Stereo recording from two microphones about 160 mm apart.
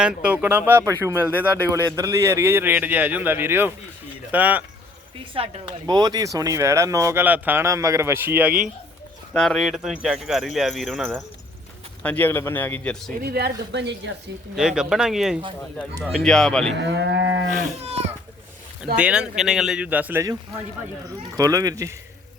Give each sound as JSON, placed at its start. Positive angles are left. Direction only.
{"t": 0.0, "sound": "speech", "side_deg": -5}
{"t": 1.3, "sound": "speech", "side_deg": 10}
{"t": 2.0, "sound": "speech", "side_deg": -20}
{"t": 5.3, "sound": "speech", "side_deg": -35}
{"t": 5.8, "sound": "speech", "side_deg": -25}
{"t": 12.0, "sound": "speech", "side_deg": 10}
{"t": 13.3, "sound": "a woman's voice", "side_deg": -90}
{"t": 14.5, "sound": "speech", "side_deg": -5}
{"t": 16.7, "sound": "a woman's voice", "side_deg": -90}
{"t": 17.6, "sound": "speech", "side_deg": -40}
{"t": 18.9, "sound": "speech", "side_deg": -5}
{"t": 21.3, "sound": "speech", "side_deg": -20}